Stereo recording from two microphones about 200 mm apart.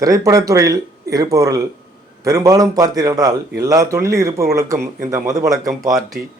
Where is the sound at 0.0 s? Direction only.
15° right (ahead or behind).